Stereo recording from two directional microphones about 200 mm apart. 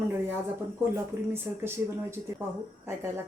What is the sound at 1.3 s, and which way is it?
Speech, 10° right (ahead or behind).